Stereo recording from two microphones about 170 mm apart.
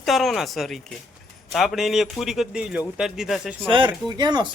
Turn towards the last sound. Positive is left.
turn(degrees=-25)  # may be behind; listen again after turning